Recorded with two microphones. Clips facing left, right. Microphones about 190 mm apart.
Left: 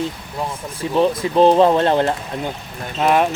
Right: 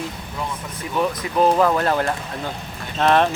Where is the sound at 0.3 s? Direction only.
30° left (ahead or behind).